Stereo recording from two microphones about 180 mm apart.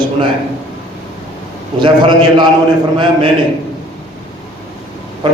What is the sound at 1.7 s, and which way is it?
Speech, 25° right (ahead or behind).